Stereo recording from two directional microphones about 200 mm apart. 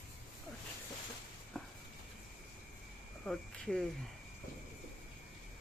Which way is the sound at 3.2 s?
5° left (ahead or behind).